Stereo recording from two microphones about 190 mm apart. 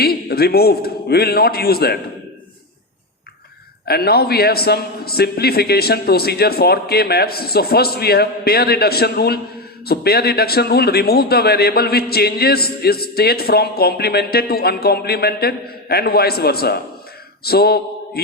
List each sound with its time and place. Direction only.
0.0 s a man's voice: 55° left (ahead or behind)
3.8 s a man's voice: 55° left (ahead or behind)